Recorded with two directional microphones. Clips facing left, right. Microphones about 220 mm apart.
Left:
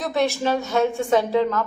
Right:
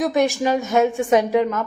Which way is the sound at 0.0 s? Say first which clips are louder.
Right 3 dB; 15° right (ahead or behind).